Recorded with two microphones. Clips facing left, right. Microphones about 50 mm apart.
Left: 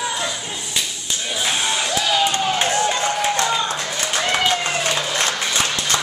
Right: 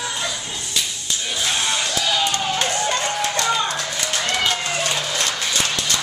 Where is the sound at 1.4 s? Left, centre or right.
Centre; by 6.0 s left.